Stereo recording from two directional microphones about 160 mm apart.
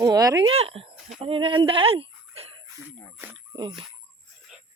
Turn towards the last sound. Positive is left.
turn(degrees=-30)  # may be behind; listen again after turning